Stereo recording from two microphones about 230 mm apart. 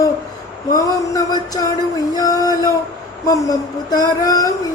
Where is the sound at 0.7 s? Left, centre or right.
Centre.